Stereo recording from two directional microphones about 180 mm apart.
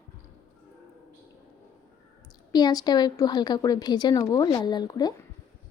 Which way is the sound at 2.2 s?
25° left (ahead or behind).